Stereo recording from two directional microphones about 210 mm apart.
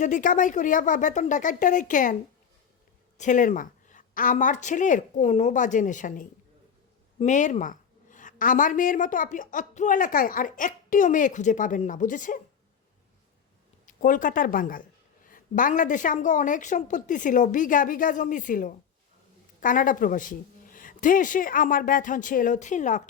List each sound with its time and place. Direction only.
0.0 s a woman's voice: 40° left (ahead or behind)
3.2 s a woman's voice: 35° left (ahead or behind)
13.8 s a woman's voice: 40° left (ahead or behind)